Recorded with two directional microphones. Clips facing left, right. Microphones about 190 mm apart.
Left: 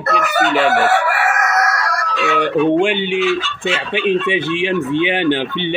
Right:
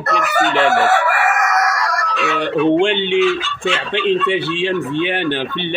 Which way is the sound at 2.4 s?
10° left (ahead or behind).